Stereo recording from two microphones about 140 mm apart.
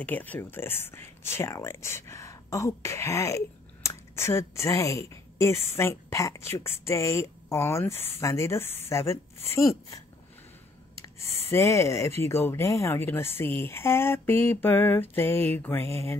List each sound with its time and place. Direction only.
0.0 s speech: 10° left (ahead or behind)
11.5 s speech: 20° left (ahead or behind)